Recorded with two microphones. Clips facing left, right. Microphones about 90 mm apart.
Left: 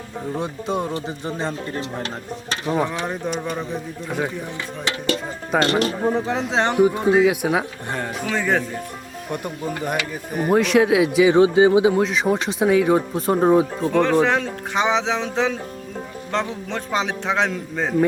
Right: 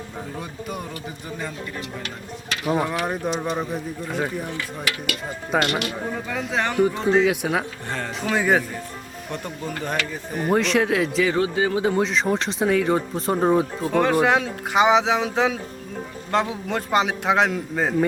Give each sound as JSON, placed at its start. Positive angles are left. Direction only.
{"t": 0.3, "sound": "speech", "side_deg": 25}
{"t": 2.6, "sound": "speech", "side_deg": -5}
{"t": 4.9, "sound": "speech", "side_deg": 30}
{"t": 6.7, "sound": "speech", "side_deg": 5}
{"t": 7.9, "sound": "speech", "side_deg": 15}
{"t": 8.3, "sound": "speech", "side_deg": -10}
{"t": 9.3, "sound": "speech", "side_deg": 10}
{"t": 11.8, "sound": "speech", "side_deg": 5}